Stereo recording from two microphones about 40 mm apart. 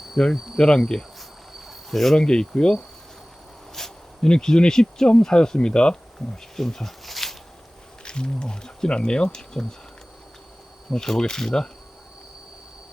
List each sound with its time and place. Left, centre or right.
0.2 s speech: centre
1.9 s speech: centre
2.1 s speech: centre
3.8 s a sound: centre
4.3 s speech: centre
8.0 s speech: left
10.9 s speech: centre